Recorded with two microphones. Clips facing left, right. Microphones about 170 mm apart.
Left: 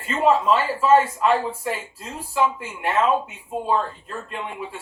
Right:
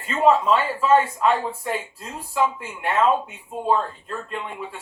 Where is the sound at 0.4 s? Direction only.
5° left (ahead or behind).